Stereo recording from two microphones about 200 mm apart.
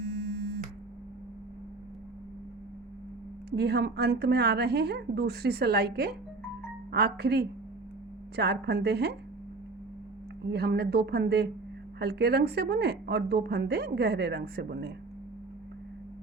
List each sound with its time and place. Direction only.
3.5 s a woman's voice: 55° right (ahead or behind)
10.4 s a woman's voice: 55° right (ahead or behind)